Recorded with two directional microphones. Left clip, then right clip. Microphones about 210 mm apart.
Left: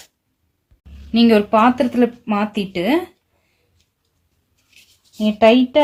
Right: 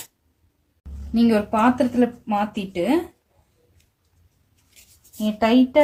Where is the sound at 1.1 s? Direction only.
40° left (ahead or behind).